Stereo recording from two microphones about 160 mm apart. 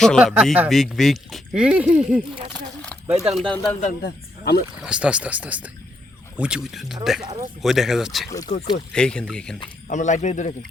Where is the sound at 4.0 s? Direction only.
85° left.